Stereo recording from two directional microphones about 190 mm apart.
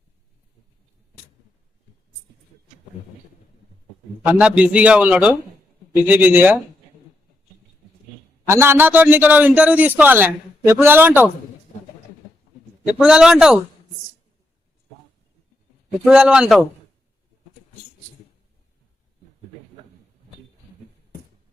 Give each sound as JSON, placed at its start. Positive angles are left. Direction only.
{"t": 4.3, "sound": "a man's voice", "side_deg": -5}
{"t": 8.4, "sound": "a man's voice", "side_deg": -15}
{"t": 11.7, "sound": "a sound", "side_deg": 35}
{"t": 12.8, "sound": "a man's voice", "side_deg": -5}
{"t": 16.0, "sound": "a man's voice", "side_deg": -5}